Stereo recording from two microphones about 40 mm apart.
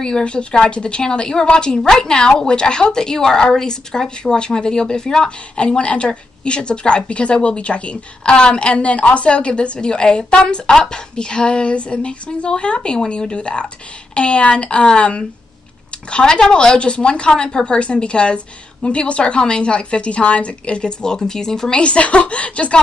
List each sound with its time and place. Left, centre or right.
0.0 s a woman's voice: left
21.8 s a woman's voice: left